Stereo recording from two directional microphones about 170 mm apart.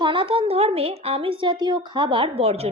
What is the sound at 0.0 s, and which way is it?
A woman's voice, 30° right (ahead or behind).